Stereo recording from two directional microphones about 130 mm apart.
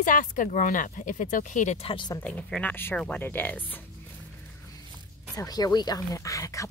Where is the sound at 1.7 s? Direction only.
40° left (ahead or behind).